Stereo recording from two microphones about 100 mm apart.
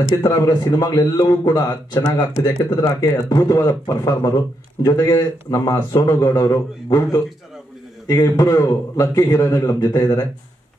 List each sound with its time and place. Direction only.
0.1 s a man's voice: 45° left (ahead or behind)